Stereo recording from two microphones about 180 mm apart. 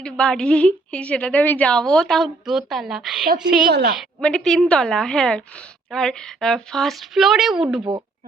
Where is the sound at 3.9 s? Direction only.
Centre (ahead or behind).